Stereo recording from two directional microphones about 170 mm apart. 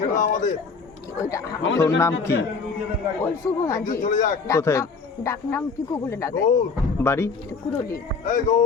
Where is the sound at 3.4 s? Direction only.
20° left (ahead or behind).